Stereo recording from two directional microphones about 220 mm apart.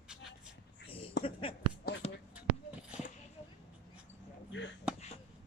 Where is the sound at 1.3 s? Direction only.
25° left (ahead or behind).